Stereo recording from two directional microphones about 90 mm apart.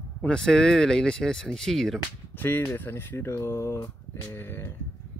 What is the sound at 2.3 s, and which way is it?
Speech, 20° left (ahead or behind).